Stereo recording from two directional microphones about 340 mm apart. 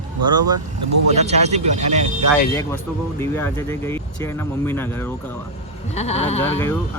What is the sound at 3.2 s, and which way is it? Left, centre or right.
Speech, centre.